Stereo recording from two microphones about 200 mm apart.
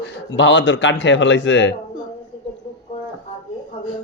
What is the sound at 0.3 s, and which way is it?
Speech, 65° left (ahead or behind).